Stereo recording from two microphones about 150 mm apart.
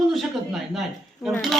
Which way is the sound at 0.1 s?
Centre (ahead or behind).